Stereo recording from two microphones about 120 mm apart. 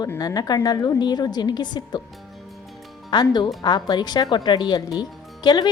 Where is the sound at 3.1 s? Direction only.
40° left (ahead or behind).